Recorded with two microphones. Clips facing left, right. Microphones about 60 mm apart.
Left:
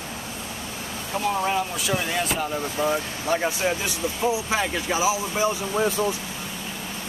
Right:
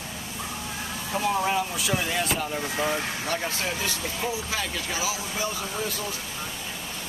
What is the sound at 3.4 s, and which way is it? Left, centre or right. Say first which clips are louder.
Speech: left 5 dB; left.